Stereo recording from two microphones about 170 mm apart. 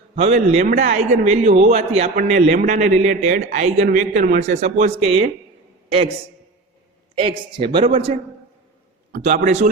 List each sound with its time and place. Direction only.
0.2 s a man's voice: 40° right (ahead or behind)
7.2 s speech: 30° right (ahead or behind)
9.1 s a man's voice: 50° right (ahead or behind)